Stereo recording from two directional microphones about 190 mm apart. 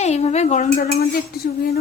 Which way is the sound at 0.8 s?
55° left (ahead or behind).